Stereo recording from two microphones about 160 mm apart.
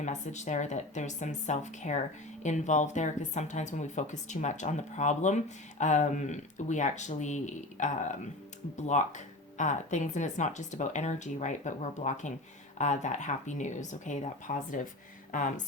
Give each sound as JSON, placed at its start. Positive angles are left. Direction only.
{"t": 0.0, "sound": "speech", "side_deg": 45}